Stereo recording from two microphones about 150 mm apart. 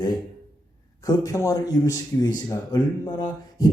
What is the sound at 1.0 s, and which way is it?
Speech, 20° left (ahead or behind).